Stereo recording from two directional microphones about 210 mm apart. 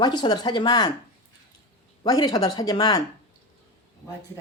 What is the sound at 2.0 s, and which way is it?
Speech, 15° left (ahead or behind).